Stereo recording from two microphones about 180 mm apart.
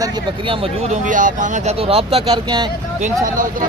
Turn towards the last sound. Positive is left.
turn(degrees=-50)  # may be behind; listen again after turning